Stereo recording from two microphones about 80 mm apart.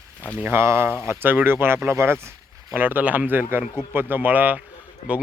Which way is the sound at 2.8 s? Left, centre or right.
Right.